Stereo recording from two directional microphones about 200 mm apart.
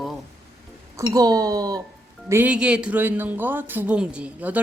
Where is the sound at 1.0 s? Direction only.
20° right (ahead or behind).